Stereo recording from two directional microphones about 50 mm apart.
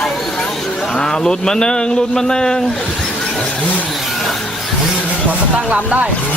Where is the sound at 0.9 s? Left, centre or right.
Centre.